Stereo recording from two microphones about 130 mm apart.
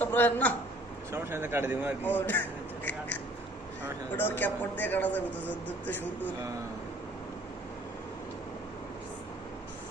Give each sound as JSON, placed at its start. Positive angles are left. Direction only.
{"t": 0.0, "sound": "a woman's voice", "side_deg": 15}
{"t": 1.1, "sound": "speech", "side_deg": -20}
{"t": 2.0, "sound": "speech", "side_deg": 15}
{"t": 4.2, "sound": "speech", "side_deg": 15}